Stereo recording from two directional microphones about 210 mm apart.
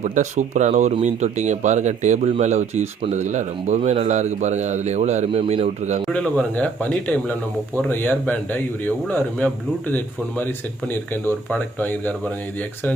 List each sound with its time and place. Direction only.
0.0 s speech: 35° right (ahead or behind)
6.1 s a man's voice: 5° left (ahead or behind)